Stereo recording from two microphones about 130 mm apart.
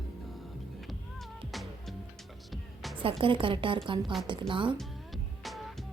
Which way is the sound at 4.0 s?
Centre (ahead or behind).